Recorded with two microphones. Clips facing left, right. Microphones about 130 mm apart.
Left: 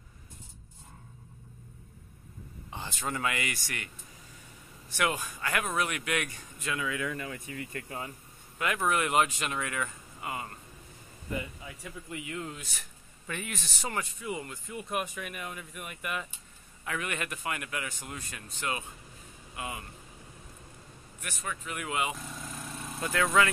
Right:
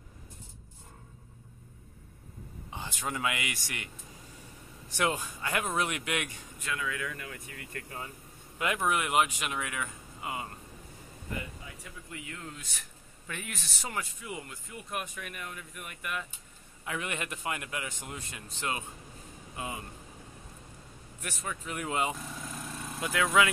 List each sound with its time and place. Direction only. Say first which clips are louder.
2.7 s speech: left 1 dB; 10° right (ahead or behind)
4.9 s a man's voice: even; 25° right (ahead or behind)
6.6 s speech: left 2 dB; 5° left (ahead or behind)
6.9 s speech: left 3 dB; 25° left (ahead or behind)
7.7 s speech: right 1 dB; 15° left (ahead or behind)
8.5 s speech: left 1 dB; 20° right (ahead or behind)
12.1 s speech: left 5 dB; 10° left (ahead or behind)
13.3 s speech: left 3 dB; centre (ahead or behind)
16.8 s a man's voice: left 1 dB; 20° right (ahead or behind)
21.2 s speech: even; 35° right (ahead or behind)
22.4 s vehicle: right 1 dB; centre (ahead or behind)
22.9 s speech: even; 10° right (ahead or behind)